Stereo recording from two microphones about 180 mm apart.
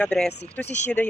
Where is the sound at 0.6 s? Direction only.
40° left (ahead or behind).